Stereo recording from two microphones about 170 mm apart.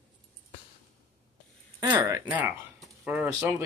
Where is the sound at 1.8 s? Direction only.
25° right (ahead or behind).